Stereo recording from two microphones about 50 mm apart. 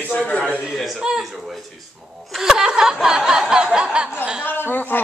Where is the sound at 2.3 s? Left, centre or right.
Centre.